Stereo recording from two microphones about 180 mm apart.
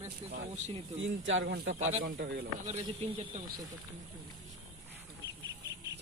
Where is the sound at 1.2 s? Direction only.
85° right.